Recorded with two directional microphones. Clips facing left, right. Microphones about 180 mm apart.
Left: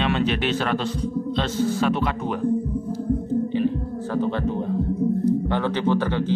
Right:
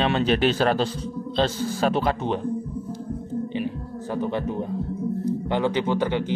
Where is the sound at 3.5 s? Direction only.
15° right (ahead or behind).